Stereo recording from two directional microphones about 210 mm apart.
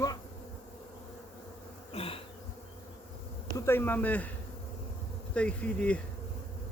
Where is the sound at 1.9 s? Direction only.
25° left (ahead or behind).